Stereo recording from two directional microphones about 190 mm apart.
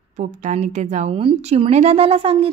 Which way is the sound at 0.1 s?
40° right (ahead or behind).